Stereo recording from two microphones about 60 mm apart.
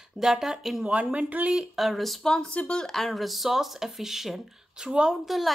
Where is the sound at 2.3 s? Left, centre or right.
Centre.